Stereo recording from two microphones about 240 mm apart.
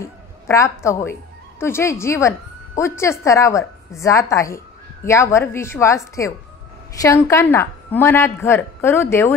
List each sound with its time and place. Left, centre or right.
0.0 s a woman's voice: centre